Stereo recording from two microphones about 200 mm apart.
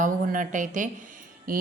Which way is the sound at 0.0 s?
40° right (ahead or behind).